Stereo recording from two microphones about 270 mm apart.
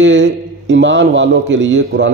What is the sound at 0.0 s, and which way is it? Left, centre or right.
A man's voice, right.